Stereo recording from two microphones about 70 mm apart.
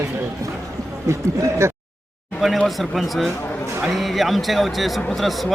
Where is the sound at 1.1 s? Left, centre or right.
Right.